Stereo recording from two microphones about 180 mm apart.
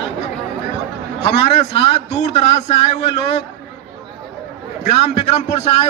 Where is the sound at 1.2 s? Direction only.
35° left (ahead or behind).